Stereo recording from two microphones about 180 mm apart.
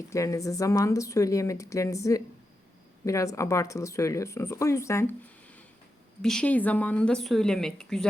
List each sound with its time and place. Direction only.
0.1 s a woman's voice: 20° left (ahead or behind)